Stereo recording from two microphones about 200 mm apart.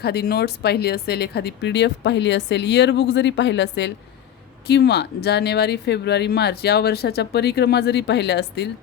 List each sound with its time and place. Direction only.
0.0 s speech: 50° left (ahead or behind)